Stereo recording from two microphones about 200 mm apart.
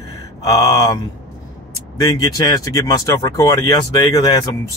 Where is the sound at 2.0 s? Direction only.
20° left (ahead or behind).